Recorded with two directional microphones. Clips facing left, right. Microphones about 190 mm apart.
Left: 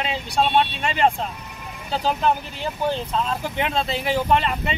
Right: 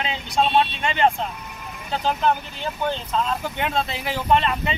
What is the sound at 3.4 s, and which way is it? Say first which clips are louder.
Speech: left 1 dB; centre (ahead or behind).